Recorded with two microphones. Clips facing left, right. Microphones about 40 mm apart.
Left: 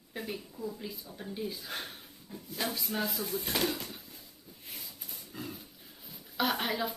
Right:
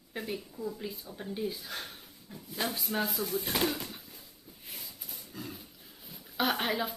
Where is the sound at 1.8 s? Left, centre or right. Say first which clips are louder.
Left 1 dB; centre.